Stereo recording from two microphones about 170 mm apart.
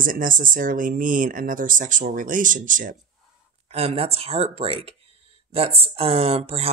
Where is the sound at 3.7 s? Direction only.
35° right (ahead or behind).